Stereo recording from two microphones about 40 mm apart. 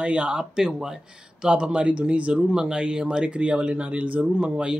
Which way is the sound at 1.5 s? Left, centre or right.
Right.